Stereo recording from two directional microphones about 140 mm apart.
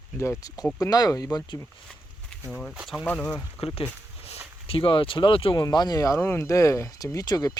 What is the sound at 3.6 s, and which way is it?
Speech, 45° left (ahead or behind).